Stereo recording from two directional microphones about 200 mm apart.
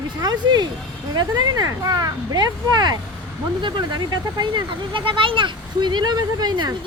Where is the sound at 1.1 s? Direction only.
90° right.